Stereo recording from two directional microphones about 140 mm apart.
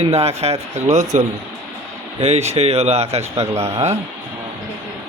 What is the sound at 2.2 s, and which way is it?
A man's voice, 50° right (ahead or behind).